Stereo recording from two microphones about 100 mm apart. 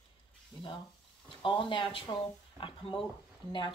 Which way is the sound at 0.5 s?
50° left (ahead or behind).